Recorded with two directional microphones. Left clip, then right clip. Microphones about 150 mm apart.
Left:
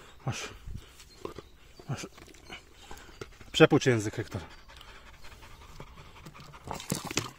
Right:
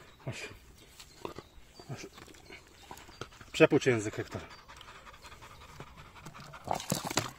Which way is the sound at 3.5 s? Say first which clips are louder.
Left 3 dB; 90° left.